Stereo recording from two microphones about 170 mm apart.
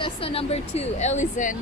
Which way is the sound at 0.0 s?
35° left (ahead or behind).